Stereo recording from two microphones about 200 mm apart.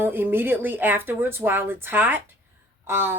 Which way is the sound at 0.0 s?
10° right (ahead or behind).